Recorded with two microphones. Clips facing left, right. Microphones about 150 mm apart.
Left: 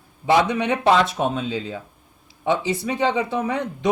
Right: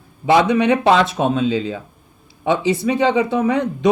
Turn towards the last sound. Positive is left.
turn(degrees=-90)